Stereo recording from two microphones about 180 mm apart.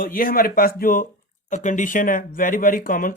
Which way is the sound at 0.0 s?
55° left (ahead or behind).